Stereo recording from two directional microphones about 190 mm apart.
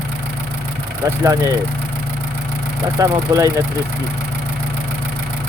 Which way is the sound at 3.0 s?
15° right (ahead or behind).